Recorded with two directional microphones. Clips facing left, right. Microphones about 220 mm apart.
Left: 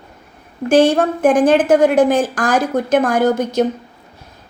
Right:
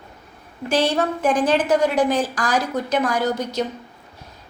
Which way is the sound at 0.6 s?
50° left (ahead or behind).